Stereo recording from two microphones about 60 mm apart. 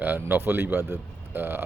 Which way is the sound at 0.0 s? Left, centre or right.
Right.